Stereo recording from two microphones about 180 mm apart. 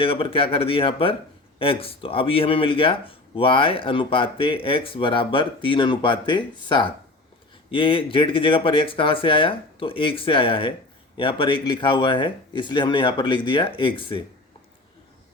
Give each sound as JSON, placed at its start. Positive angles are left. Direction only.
{"t": 0.0, "sound": "speech", "side_deg": 30}